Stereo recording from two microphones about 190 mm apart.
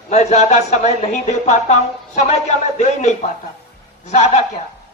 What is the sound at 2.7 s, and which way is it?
Speech, 35° left (ahead or behind).